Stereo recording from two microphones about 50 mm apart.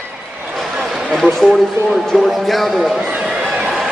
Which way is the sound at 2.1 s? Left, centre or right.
Centre.